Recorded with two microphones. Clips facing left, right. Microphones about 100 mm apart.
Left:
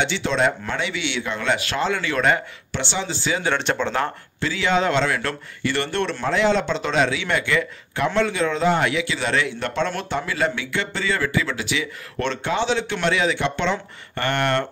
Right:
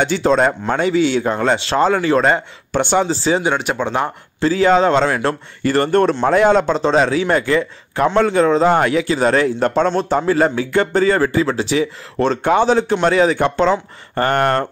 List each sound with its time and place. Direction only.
0.0 s speech: 45° right (ahead or behind)
2.8 s speech: 50° right (ahead or behind)
3.1 s speech: 35° right (ahead or behind)
3.4 s speech: 10° right (ahead or behind)
4.4 s speech: 40° right (ahead or behind)
9.8 s speech: 30° right (ahead or behind)
10.1 s speech: 40° right (ahead or behind)